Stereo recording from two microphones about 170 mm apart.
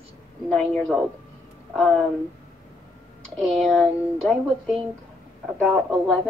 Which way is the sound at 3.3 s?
Centre (ahead or behind).